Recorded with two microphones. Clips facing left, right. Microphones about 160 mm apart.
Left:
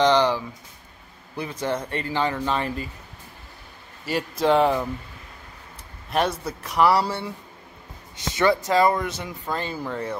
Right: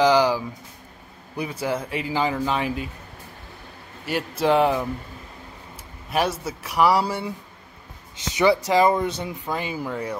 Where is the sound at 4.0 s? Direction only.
Centre (ahead or behind).